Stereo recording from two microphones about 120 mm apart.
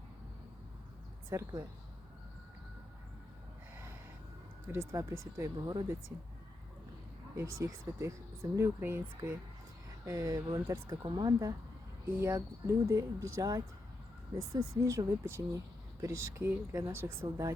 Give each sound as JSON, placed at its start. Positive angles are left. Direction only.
{"t": 1.3, "sound": "speech", "side_deg": -20}
{"t": 4.7, "sound": "speech", "side_deg": -15}
{"t": 5.5, "sound": "speech", "side_deg": -35}
{"t": 7.3, "sound": "speech", "side_deg": -25}
{"t": 10.1, "sound": "speech", "side_deg": -30}